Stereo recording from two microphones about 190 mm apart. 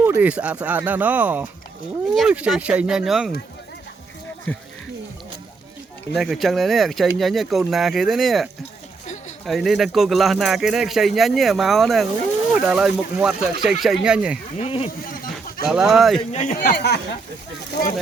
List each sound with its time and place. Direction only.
0.0 s speech: 10° right (ahead or behind)
4.5 s speech: 5° left (ahead or behind)
6.1 s speech: centre (ahead or behind)
9.5 s speech: centre (ahead or behind)
14.6 s speech: 30° left (ahead or behind)
15.0 s a sound: 50° left (ahead or behind)
15.6 s speech: 5° right (ahead or behind)
16.3 s speech: 40° left (ahead or behind); by 17.0 s 55° left (ahead or behind)